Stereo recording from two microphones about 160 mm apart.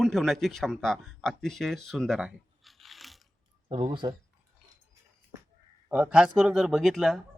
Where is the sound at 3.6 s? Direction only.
30° right (ahead or behind).